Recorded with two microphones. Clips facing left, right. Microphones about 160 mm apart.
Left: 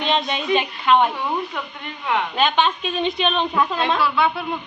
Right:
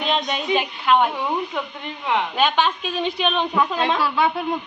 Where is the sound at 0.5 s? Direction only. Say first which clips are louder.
Left 1 dB; 5° right (ahead or behind).